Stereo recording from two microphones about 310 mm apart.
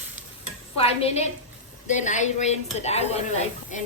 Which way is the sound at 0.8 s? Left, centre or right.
Centre.